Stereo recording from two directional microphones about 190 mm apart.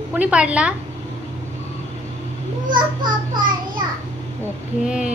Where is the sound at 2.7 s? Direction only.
25° right (ahead or behind).